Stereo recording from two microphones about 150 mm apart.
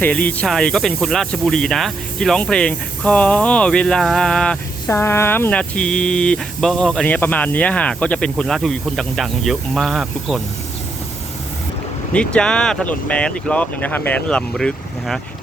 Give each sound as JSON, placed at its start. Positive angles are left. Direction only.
{"t": 0.0, "sound": "speech", "side_deg": 10}
{"t": 4.9, "sound": "speech", "side_deg": 15}
{"t": 12.1, "sound": "speech", "side_deg": 5}